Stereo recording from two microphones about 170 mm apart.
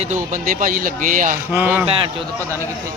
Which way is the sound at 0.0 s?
45° right (ahead or behind).